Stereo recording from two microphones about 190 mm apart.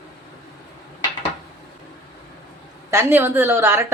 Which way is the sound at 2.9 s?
10° right (ahead or behind).